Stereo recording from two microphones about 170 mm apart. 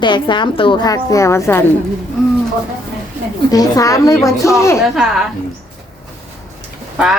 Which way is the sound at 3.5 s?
20° left (ahead or behind).